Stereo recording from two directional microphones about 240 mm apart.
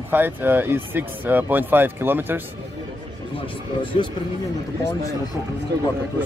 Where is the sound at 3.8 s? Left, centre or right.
Left.